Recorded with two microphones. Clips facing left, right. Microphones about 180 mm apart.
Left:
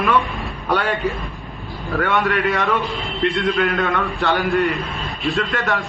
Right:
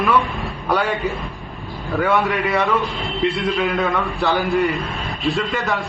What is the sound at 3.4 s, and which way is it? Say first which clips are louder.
A man's voice: left 1 dB; 5° right (ahead or behind).